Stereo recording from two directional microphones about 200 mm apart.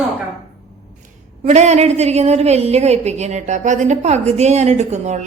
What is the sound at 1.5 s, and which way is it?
A woman's voice, 35° right (ahead or behind).